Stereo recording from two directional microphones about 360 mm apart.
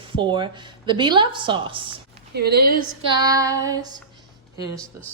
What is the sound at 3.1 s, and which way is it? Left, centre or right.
A woman's voice, centre.